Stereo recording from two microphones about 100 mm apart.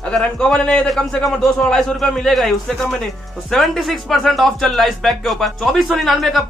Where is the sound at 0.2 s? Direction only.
5° left (ahead or behind).